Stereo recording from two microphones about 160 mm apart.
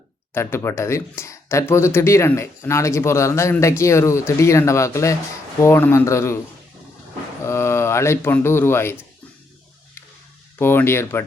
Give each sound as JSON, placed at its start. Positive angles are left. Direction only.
{"t": 0.3, "sound": "speech", "side_deg": 15}
{"t": 7.4, "sound": "a man's voice", "side_deg": 15}
{"t": 10.6, "sound": "speech", "side_deg": 15}